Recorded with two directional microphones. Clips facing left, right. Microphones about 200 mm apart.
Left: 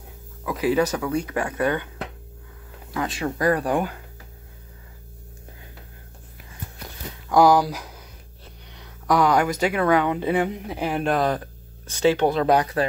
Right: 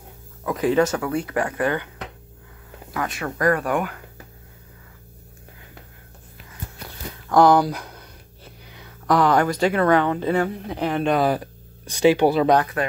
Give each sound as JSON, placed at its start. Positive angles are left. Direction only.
{"t": 0.6, "sound": "speech", "side_deg": 10}
{"t": 2.9, "sound": "speech", "side_deg": 30}
{"t": 7.2, "sound": "speech", "side_deg": 5}
{"t": 10.7, "sound": "speech", "side_deg": 5}
{"t": 11.2, "sound": "speech", "side_deg": -10}
{"t": 12.8, "sound": "speech", "side_deg": 30}